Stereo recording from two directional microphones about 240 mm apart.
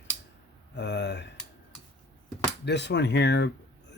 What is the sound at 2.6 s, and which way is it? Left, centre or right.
Speech, left.